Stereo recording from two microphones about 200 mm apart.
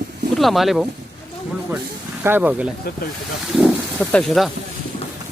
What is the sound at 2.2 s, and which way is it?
Speech, 10° right (ahead or behind).